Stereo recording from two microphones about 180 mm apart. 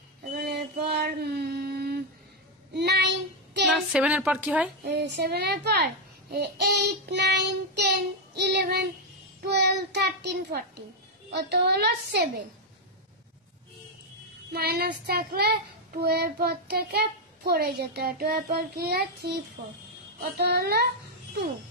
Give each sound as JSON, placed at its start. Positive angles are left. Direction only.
{"t": 0.2, "sound": "a sound", "side_deg": -60}
{"t": 2.7, "sound": "child singing", "side_deg": -70}
{"t": 3.6, "sound": "speech", "side_deg": -5}
{"t": 4.8, "sound": "child singing", "side_deg": -65}
{"t": 14.5, "sound": "child singing", "side_deg": -60}